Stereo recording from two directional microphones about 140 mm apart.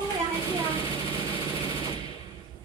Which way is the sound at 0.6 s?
40° left (ahead or behind).